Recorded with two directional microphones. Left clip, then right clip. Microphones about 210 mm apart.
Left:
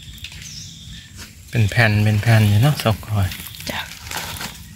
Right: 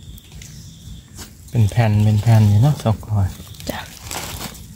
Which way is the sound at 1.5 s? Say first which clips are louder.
Left 4 dB; centre (ahead or behind).